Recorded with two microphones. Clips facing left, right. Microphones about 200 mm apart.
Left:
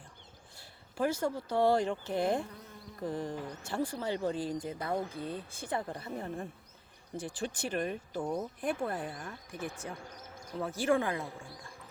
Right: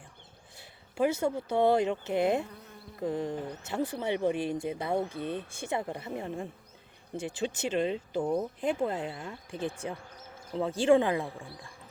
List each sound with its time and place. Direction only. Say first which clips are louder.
0.6 s speech: right 4 dB; 20° right (ahead or behind)
7.2 s speech: right 4 dB; 25° right (ahead or behind)
8.2 s speech: right 5 dB; 5° right (ahead or behind)
8.6 s speech: right 4 dB; 20° right (ahead or behind)